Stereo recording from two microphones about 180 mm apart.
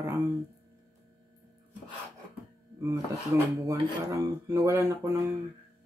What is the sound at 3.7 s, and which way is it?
Speech, 20° right (ahead or behind).